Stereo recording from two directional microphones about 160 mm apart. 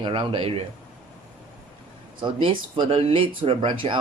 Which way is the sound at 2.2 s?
30° right (ahead or behind).